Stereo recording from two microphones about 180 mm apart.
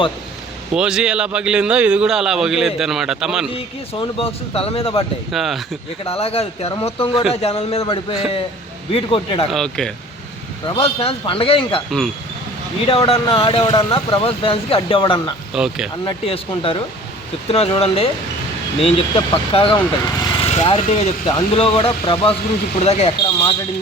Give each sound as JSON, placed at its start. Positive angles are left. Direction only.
{"t": 0.7, "sound": "a man's voice", "side_deg": -5}
{"t": 3.5, "sound": "speech", "side_deg": 30}
{"t": 5.3, "sound": "a man's voice", "side_deg": 0}
{"t": 6.1, "sound": "speech", "side_deg": 35}
{"t": 9.5, "sound": "a man's voice", "side_deg": 5}
{"t": 10.7, "sound": "speech", "side_deg": 30}
{"t": 11.9, "sound": "a man's voice", "side_deg": 0}
{"t": 12.9, "sound": "speech", "side_deg": 30}
{"t": 15.5, "sound": "a man's voice", "side_deg": -5}
{"t": 16.0, "sound": "speech", "side_deg": 30}